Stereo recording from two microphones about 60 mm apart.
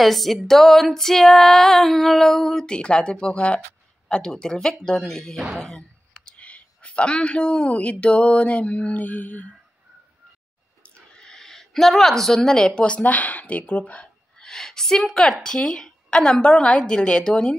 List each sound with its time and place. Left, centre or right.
0.0 s female singing: centre
4.1 s a woman's voice: centre
5.6 s a sound: centre
6.3 s speech: left
10.8 s speech: centre
14.4 s a woman's voice: centre